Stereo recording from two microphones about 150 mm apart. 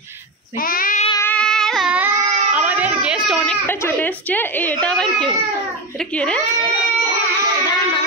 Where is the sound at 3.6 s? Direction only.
15° left (ahead or behind).